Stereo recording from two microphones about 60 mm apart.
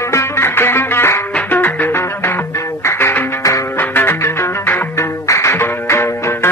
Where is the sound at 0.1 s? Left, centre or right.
Left.